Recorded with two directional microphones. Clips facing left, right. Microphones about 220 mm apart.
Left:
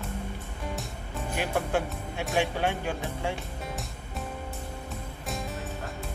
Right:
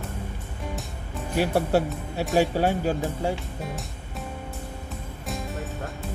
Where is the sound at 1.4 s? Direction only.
35° right (ahead or behind).